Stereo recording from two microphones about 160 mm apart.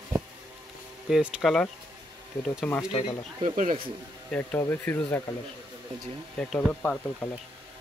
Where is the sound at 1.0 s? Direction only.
5° right (ahead or behind).